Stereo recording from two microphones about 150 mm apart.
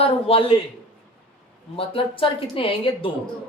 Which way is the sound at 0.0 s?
40° left (ahead or behind).